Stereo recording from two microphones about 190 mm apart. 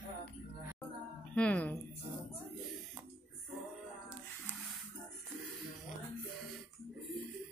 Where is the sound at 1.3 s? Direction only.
5° left (ahead or behind).